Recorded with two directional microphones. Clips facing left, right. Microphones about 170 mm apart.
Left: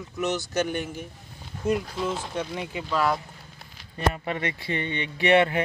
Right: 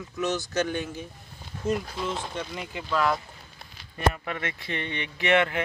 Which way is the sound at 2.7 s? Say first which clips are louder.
Even; 5° left (ahead or behind).